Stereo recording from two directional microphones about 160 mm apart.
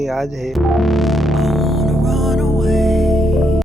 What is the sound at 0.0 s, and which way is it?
Music, centre (ahead or behind).